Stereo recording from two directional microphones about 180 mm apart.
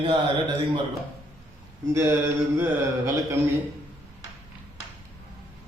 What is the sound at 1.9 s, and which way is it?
Mantra, 10° right (ahead or behind).